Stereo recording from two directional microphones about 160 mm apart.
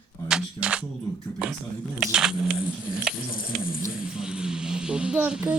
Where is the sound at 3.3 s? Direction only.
65° left (ahead or behind).